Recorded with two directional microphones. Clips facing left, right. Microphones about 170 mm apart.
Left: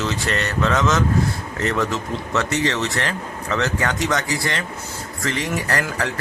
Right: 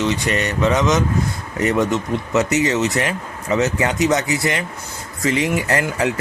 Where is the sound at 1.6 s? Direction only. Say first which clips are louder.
Right 4 dB; 15° right (ahead or behind).